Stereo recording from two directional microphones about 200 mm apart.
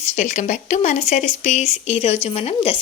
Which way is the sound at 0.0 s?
35° left (ahead or behind).